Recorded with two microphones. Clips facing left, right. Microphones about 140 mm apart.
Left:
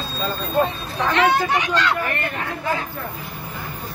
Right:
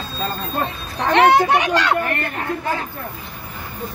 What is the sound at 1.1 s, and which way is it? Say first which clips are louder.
Speech: right 6 dB; 65° right (ahead or behind).